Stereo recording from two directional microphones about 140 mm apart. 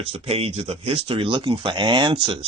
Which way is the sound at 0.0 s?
45° right (ahead or behind).